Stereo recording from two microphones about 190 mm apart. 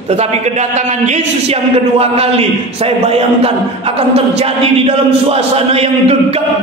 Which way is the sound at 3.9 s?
30° right (ahead or behind).